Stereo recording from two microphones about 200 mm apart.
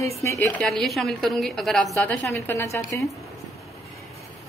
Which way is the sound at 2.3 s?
15° left (ahead or behind).